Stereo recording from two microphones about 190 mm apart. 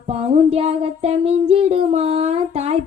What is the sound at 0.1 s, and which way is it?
A woman's voice, 35° right (ahead or behind).